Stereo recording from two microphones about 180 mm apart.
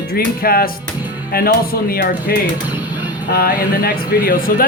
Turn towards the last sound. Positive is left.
turn(degrees=55)  # may be behind; listen again after turning